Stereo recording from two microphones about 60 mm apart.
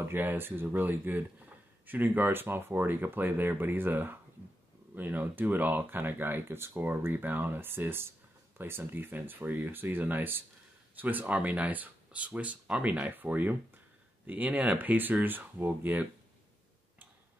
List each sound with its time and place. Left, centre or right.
0.0 s speech: right